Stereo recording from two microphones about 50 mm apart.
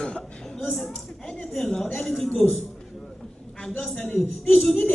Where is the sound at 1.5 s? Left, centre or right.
Centre.